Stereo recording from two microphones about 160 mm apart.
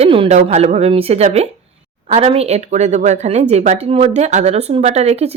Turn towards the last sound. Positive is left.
turn(degrees=-40)  # may be behind; listen again after turning